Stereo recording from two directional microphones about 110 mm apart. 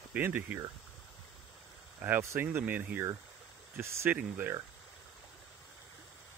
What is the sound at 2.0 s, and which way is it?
Speech, 20° right (ahead or behind).